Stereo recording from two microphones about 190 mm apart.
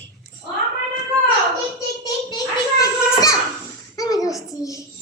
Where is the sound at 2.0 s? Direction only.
20° left (ahead or behind).